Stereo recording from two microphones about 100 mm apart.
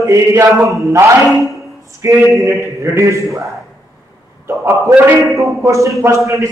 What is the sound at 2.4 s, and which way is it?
A man's voice, 30° right (ahead or behind).